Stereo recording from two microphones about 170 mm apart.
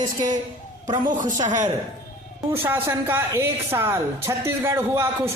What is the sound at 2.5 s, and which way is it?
Speech, 15° right (ahead or behind).